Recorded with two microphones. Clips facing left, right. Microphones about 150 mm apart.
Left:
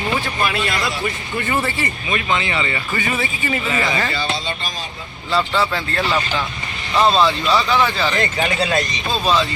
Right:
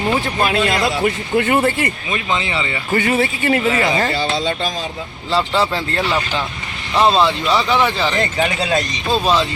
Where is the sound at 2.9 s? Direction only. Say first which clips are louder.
Right 6 dB; 60° right (ahead or behind).